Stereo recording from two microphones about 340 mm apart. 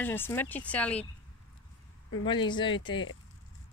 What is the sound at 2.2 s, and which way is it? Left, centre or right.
Speech, centre.